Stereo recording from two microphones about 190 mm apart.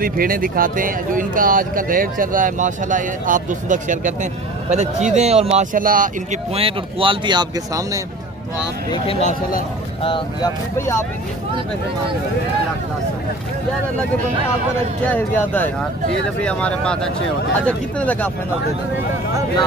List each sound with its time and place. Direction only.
0.0 s speech: 50° right (ahead or behind)
6.5 s speech: 30° right (ahead or behind)
8.9 s speech: 30° left (ahead or behind)
15.0 s speech: 10° left (ahead or behind)